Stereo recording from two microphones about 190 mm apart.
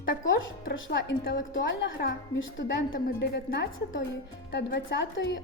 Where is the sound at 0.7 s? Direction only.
80° left.